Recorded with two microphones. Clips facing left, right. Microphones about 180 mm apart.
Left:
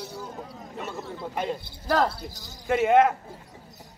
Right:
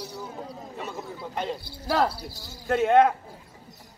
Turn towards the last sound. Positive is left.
turn(degrees=5)  # may be behind; listen again after turning